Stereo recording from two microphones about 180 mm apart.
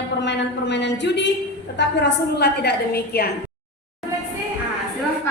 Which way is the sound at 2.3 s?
65° left (ahead or behind).